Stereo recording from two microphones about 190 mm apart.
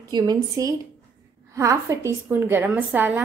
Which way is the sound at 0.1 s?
20° right (ahead or behind).